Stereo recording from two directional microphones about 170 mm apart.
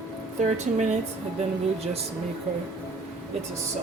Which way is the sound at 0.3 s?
45° right (ahead or behind).